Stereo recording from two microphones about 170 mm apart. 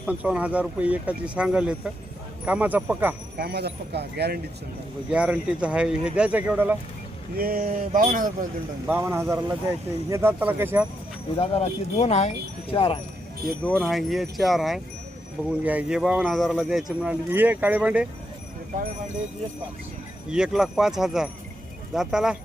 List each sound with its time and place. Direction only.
0.0 s speech: 5° right (ahead or behind)
3.3 s speech: 70° right (ahead or behind)
5.1 s speech: 5° right (ahead or behind)
7.3 s speech: 60° right (ahead or behind)
8.9 s speech: 15° right (ahead or behind)
11.3 s speech: 35° left (ahead or behind)
13.7 s speech: centre (ahead or behind)
20.3 s speech: 5° right (ahead or behind)